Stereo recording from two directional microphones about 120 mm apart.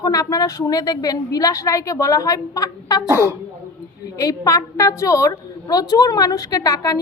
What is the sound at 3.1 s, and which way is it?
Speech, 20° right (ahead or behind).